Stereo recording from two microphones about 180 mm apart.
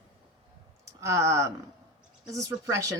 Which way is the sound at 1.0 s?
15° right (ahead or behind).